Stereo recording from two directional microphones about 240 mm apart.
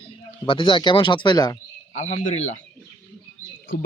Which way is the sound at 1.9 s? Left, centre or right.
Left.